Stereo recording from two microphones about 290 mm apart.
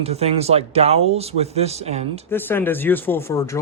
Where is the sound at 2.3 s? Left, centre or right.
Centre.